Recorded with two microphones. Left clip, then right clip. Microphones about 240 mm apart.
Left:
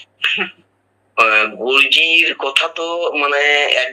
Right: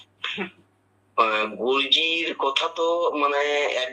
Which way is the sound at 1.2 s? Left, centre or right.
Centre.